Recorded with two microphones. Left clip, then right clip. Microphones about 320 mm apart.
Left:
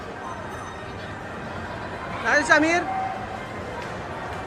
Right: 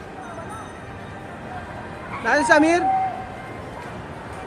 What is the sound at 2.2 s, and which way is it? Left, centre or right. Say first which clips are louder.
Speech: right 2 dB; centre.